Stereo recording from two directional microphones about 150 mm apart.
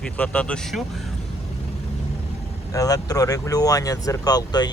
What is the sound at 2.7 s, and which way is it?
Speech, 25° left (ahead or behind).